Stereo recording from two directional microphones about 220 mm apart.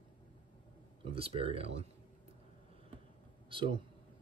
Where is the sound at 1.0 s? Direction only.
25° right (ahead or behind).